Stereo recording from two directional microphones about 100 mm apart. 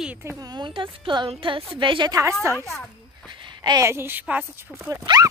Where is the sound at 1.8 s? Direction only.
55° right (ahead or behind).